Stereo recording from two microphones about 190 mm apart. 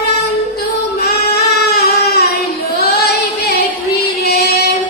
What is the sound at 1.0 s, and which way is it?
Child singing, 55° left (ahead or behind).